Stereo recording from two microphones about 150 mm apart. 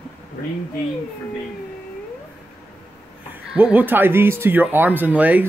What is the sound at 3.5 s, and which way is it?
Speech, 10° right (ahead or behind).